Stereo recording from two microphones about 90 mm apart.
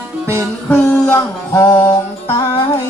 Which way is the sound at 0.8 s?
35° left (ahead or behind).